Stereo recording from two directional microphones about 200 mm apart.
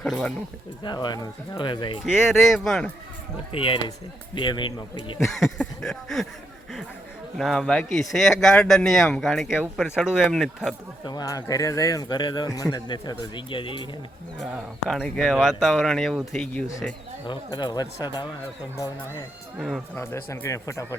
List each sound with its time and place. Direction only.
0.0 s speech: 5° left (ahead or behind)
0.9 s speech: 20° left (ahead or behind)
2.0 s speech: 5° right (ahead or behind)
3.5 s speech: 25° left (ahead or behind)
5.4 s speech: centre (ahead or behind)
7.3 s speech: centre (ahead or behind)
11.0 s speech: 20° left (ahead or behind)
14.5 s speech: 5° right (ahead or behind)
17.2 s speech: 20° left (ahead or behind)
19.5 s speech: 5° right (ahead or behind)
20.0 s speech: 10° left (ahead or behind)